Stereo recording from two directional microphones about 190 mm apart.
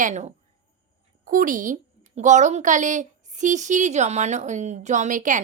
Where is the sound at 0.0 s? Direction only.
35° right (ahead or behind).